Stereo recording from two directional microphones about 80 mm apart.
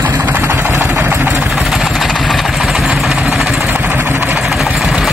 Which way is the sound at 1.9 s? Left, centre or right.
Centre.